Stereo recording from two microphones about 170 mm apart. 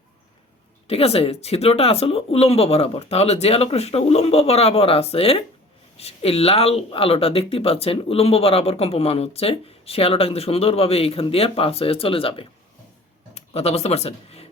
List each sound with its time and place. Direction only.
0.9 s speech: 35° left (ahead or behind)